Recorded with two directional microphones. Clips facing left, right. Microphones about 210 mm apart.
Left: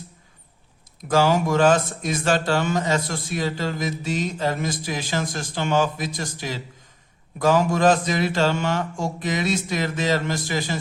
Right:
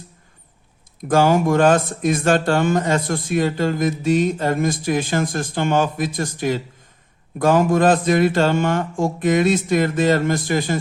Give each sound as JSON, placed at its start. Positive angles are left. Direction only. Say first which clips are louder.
{"t": 1.0, "sound": "speech", "louder": "right 4 dB", "side_deg": -50}